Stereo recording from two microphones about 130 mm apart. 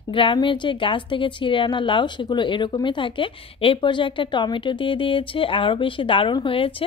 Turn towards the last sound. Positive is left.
turn(degrees=45)  # may be behind; listen again after turning